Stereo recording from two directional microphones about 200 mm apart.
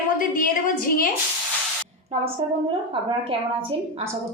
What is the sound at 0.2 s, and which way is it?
Speech, 45° left (ahead or behind).